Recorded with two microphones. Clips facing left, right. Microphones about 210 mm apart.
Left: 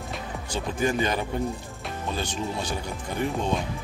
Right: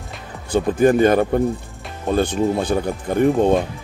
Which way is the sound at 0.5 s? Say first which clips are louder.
Right 12 dB; 55° right (ahead or behind).